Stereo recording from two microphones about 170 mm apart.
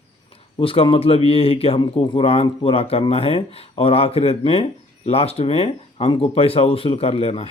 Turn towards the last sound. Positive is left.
turn(degrees=35)  # may be behind; listen again after turning